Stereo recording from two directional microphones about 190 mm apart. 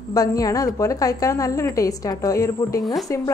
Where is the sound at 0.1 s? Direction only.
20° left (ahead or behind).